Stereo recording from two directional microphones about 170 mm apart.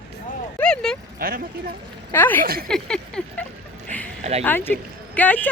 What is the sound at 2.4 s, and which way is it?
Speech, 60° right (ahead or behind).